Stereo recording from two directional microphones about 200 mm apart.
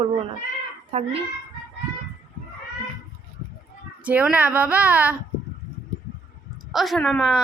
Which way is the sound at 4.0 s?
5° right (ahead or behind).